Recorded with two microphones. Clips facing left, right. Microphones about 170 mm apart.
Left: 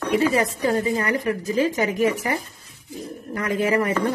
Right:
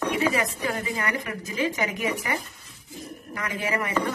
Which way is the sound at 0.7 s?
35° left (ahead or behind).